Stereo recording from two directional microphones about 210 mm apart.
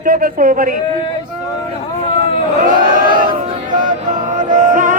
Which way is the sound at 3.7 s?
40° right (ahead or behind).